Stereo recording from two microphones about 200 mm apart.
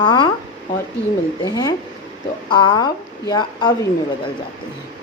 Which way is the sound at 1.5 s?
20° left (ahead or behind).